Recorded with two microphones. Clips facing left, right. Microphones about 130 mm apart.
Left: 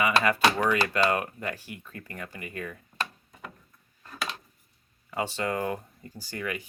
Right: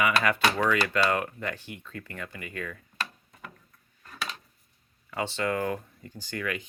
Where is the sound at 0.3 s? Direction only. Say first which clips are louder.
Left 1 dB; 10° left (ahead or behind).